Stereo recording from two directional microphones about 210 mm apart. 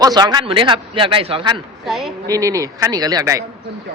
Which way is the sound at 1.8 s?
Centre (ahead or behind).